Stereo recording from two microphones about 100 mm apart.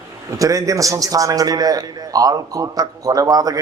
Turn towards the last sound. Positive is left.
turn(degrees=-40)  # may be behind; listen again after turning